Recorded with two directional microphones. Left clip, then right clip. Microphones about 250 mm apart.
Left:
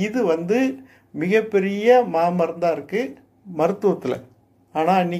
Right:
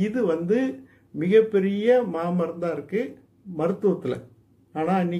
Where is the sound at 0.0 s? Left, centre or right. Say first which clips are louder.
Left 3 dB; centre.